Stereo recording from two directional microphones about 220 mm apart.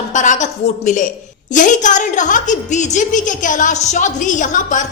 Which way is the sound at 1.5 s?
35° left (ahead or behind).